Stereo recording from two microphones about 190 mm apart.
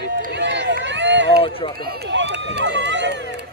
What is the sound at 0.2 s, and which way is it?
Run, 65° right (ahead or behind).